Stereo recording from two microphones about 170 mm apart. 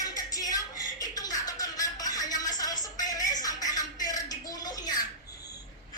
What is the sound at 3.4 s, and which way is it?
Music, 20° left (ahead or behind).